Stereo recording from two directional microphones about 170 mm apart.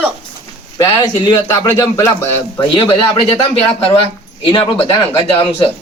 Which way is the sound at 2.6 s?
30° left (ahead or behind).